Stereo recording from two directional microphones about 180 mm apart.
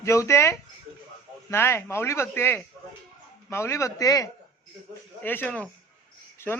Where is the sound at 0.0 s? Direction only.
15° left (ahead or behind).